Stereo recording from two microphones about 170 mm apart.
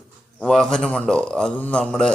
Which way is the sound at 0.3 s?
5° left (ahead or behind).